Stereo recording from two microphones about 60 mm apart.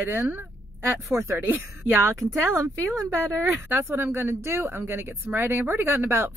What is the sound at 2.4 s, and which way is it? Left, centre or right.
Speech, right.